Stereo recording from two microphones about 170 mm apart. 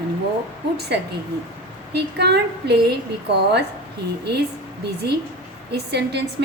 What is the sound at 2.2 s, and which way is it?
A woman's voice, 75° right (ahead or behind).